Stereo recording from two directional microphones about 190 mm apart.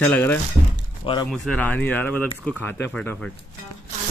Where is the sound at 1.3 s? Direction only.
5° left (ahead or behind).